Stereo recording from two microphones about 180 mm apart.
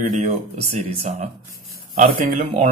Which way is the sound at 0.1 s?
40° right (ahead or behind).